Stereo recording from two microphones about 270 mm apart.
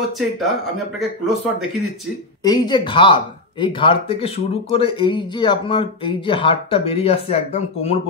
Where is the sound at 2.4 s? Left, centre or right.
Centre.